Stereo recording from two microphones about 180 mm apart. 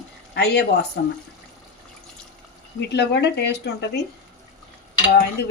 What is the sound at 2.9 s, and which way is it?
Speech, 70° left (ahead or behind).